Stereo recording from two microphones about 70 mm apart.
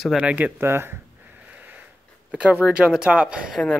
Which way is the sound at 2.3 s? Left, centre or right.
Centre.